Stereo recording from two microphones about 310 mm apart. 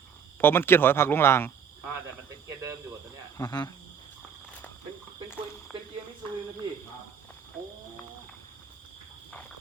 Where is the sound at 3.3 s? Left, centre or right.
Centre.